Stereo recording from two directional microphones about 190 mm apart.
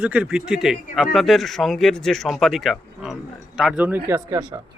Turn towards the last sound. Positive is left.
turn(degrees=-20)  # may be behind; listen again after turning